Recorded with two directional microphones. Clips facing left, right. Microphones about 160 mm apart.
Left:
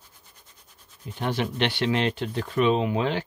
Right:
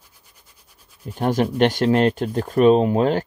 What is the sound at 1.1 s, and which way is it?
Speech, 45° right (ahead or behind).